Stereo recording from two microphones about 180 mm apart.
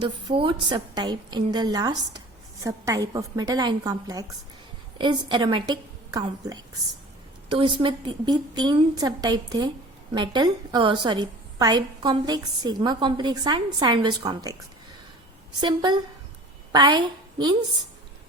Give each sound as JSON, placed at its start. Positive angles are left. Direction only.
{"t": 0.0, "sound": "a woman's voice", "side_deg": -25}
{"t": 7.6, "sound": "a woman's voice", "side_deg": -25}
{"t": 15.6, "sound": "a woman's voice", "side_deg": -25}